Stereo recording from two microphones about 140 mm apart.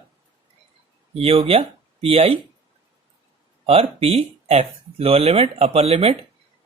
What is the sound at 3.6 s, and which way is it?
Speech, 45° right (ahead or behind).